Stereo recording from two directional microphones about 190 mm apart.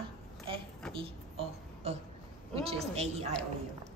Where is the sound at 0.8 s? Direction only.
5° left (ahead or behind).